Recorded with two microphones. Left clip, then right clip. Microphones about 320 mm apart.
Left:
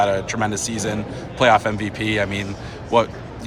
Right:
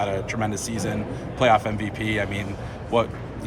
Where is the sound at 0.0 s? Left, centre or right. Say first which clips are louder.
Left 6 dB; centre.